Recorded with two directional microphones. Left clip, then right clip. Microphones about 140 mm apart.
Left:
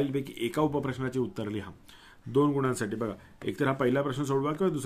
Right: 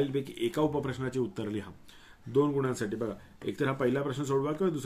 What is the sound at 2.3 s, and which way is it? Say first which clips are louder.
Speech: left 2 dB; 35° left (ahead or behind).